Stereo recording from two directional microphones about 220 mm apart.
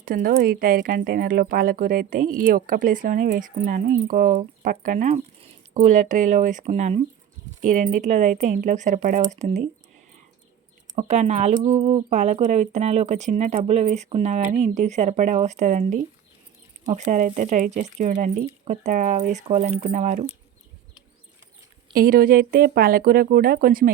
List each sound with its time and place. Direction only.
0.0 s speech: 40° right (ahead or behind)
10.9 s speech: 30° right (ahead or behind)
21.9 s speech: 40° right (ahead or behind)